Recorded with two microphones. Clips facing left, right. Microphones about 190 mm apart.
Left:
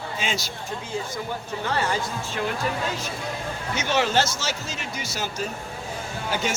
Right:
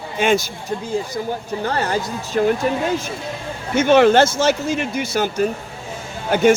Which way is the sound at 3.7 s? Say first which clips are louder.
Right 11 dB; 55° right (ahead or behind).